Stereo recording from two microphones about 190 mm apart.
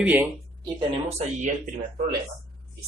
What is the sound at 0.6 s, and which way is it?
Speech, 25° right (ahead or behind).